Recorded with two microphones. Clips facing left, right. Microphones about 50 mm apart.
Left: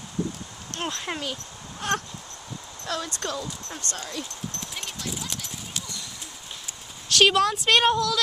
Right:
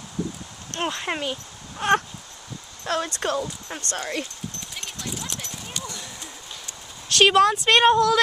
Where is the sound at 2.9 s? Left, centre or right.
Right.